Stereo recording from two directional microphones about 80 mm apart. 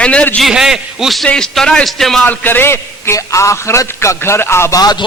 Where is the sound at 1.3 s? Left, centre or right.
Centre.